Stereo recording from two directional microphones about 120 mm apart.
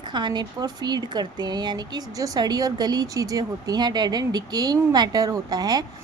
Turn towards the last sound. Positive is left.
turn(degrees=-30)  # may be behind; listen again after turning